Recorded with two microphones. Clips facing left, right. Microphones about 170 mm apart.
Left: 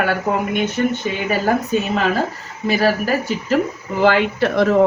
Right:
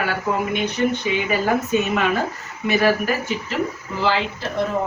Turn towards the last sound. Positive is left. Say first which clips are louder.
# left 8 dB
turn(degrees=80)